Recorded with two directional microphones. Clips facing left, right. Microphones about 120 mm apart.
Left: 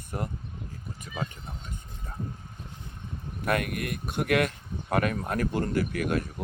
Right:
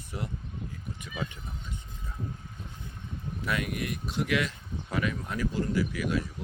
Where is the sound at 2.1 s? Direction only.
45° left (ahead or behind).